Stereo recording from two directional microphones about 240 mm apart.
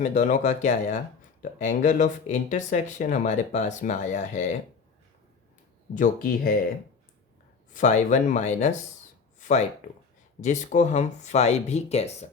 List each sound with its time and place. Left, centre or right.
0.0 s speech: left
5.9 s speech: left
7.7 s speech: left